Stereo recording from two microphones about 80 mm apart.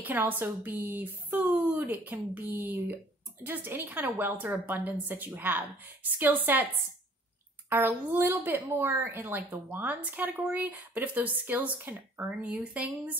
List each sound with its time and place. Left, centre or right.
0.0 s speech: right
7.7 s speech: right